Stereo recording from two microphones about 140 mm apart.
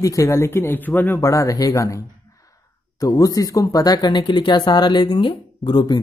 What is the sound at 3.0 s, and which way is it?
Speech, 25° left (ahead or behind).